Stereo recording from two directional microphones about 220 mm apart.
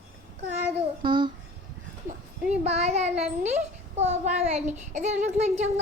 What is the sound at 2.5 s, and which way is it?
A child's voice, 30° right (ahead or behind).